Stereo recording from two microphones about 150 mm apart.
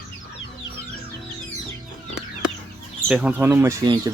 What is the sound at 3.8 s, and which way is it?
Speech, 30° right (ahead or behind).